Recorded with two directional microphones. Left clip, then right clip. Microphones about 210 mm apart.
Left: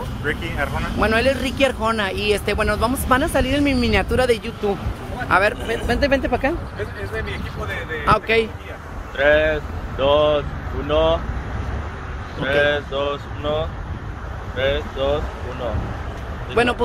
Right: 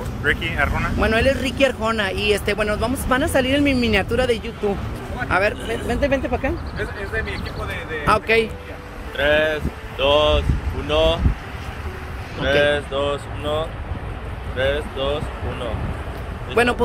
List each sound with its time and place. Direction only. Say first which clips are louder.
0.2 s speech: right 4 dB; centre (ahead or behind)
8.0 s speech: even; 5° right (ahead or behind)
9.1 s speech: left 2 dB; 40° left (ahead or behind)
12.4 s speech: right 1 dB; 40° left (ahead or behind)
16.6 s speech: right 1 dB; 5° right (ahead or behind)